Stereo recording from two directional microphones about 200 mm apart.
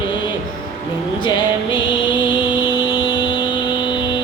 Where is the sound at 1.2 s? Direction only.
25° left (ahead or behind).